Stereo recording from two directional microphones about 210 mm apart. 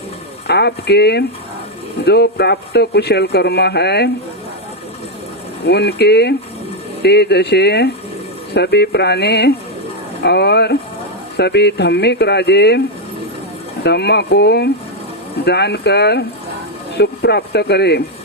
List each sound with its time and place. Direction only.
0.4 s speech: 50° left (ahead or behind)
5.6 s speech: 50° left (ahead or behind)
13.8 s speech: 50° left (ahead or behind)